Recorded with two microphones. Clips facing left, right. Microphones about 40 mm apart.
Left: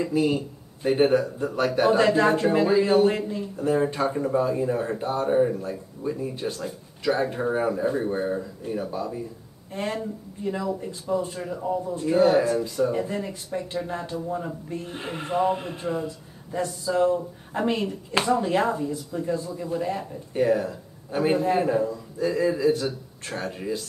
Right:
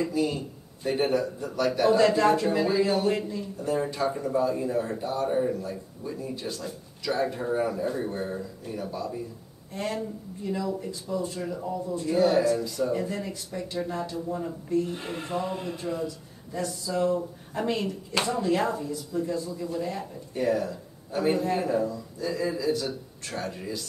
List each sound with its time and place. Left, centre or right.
0.1 s a man's voice: left
2.0 s a man's voice: centre
6.4 s speech: left
7.1 s speech: left
10.4 s speech: left